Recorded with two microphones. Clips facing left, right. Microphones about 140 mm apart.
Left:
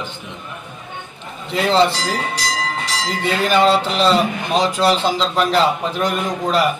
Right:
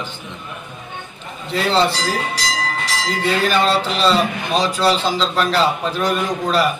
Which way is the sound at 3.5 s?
20° left (ahead or behind).